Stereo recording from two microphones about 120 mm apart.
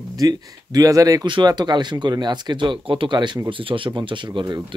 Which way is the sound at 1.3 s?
40° right (ahead or behind).